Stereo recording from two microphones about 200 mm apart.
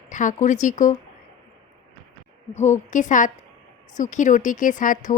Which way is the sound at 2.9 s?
40° left (ahead or behind).